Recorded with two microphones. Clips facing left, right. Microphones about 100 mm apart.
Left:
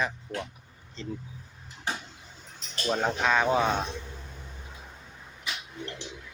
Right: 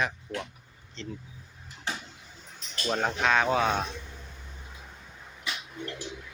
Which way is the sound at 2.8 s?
5° left (ahead or behind).